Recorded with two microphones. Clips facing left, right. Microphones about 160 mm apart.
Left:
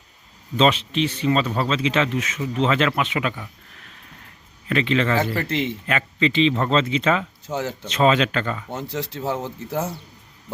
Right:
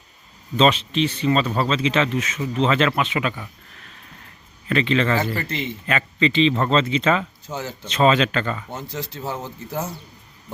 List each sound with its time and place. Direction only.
0.5 s speech: 10° left (ahead or behind)
4.7 s speech: 10° left (ahead or behind)
5.3 s a man's voice: 80° left
5.8 s speech: 10° left (ahead or behind)
7.4 s speech: 70° left (ahead or behind)
7.9 s speech: 10° left (ahead or behind)
8.9 s a man's voice: 80° left